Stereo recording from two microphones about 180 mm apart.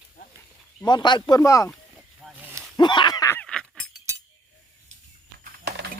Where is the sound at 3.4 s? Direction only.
5° left (ahead or behind).